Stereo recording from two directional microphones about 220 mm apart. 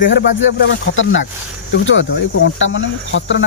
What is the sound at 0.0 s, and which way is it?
Speech, 50° left (ahead or behind).